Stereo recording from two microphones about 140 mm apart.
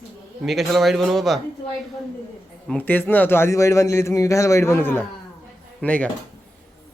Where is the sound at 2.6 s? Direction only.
10° left (ahead or behind).